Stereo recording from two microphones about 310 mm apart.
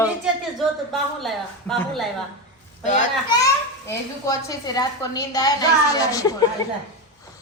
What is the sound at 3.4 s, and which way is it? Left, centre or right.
A woman's voice, centre.